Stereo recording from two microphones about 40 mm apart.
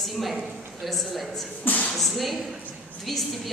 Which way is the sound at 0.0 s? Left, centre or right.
Centre.